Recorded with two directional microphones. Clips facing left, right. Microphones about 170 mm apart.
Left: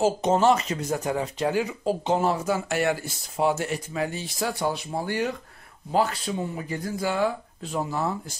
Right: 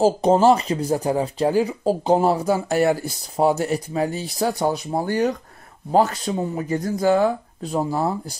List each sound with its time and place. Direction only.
0.0 s speech: 35° right (ahead or behind)